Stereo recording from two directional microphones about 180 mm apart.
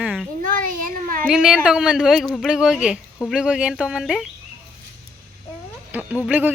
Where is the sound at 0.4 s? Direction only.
50° right (ahead or behind).